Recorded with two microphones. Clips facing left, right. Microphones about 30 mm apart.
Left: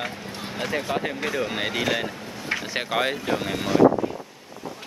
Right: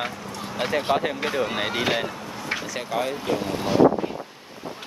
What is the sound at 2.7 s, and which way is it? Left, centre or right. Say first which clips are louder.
Speech: left 4 dB; left.